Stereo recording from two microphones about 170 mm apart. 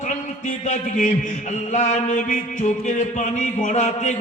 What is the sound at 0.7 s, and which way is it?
A man's voice, 45° left (ahead or behind).